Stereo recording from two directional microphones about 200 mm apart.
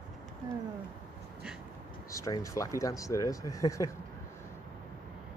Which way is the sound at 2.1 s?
15° left (ahead or behind).